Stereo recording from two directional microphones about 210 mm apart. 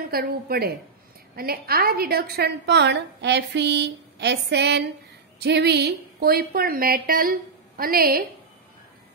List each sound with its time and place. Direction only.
0.1 s a woman's voice: 45° right (ahead or behind)